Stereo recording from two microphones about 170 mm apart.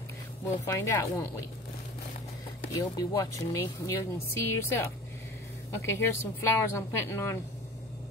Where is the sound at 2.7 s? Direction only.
20° left (ahead or behind).